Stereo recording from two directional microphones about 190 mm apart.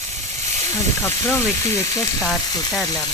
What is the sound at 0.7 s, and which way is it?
Speech, 10° left (ahead or behind).